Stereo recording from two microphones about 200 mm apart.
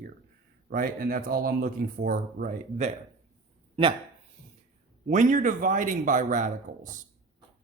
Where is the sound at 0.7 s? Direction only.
45° right (ahead or behind).